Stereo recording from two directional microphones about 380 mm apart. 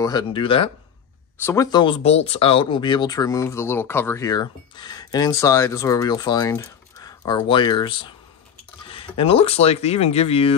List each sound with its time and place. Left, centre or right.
0.0 s speech: centre